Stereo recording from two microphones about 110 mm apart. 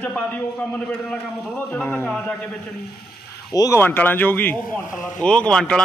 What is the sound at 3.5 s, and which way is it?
Speech, 35° left (ahead or behind).